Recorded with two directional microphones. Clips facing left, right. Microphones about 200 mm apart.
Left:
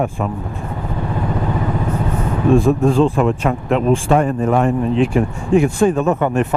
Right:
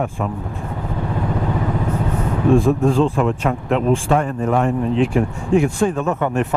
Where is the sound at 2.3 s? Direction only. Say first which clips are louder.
Left 1 dB; 20° left (ahead or behind).